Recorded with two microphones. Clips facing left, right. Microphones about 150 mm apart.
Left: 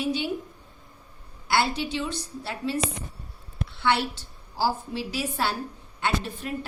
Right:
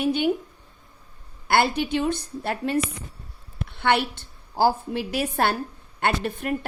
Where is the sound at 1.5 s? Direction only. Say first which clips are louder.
Right 4 dB; 55° right (ahead or behind).